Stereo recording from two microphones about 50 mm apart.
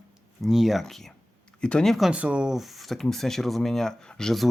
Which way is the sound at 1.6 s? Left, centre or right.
Centre.